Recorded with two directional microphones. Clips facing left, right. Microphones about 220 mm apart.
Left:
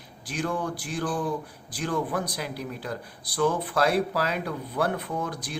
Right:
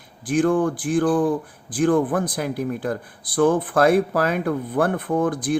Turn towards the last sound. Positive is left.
turn(degrees=-50)  # may be behind; listen again after turning